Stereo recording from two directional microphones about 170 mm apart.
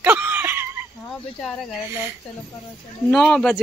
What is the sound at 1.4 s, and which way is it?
Speech, centre (ahead or behind).